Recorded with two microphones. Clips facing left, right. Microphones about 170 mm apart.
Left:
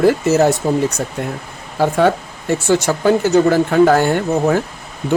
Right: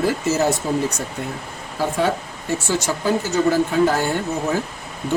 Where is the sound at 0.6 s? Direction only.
60° left (ahead or behind).